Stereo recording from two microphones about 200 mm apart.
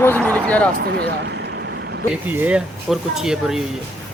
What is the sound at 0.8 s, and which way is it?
Vehicle, 55° right (ahead or behind).